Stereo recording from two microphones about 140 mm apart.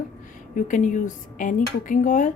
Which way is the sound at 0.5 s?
65° left (ahead or behind).